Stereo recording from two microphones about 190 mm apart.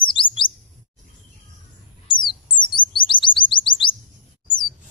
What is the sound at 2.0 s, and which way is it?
Chirp, 25° left (ahead or behind).